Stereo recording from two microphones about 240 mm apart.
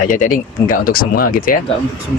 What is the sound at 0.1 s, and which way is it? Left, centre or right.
Speech, left.